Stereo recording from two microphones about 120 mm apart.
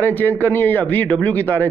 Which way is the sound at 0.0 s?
15° left (ahead or behind).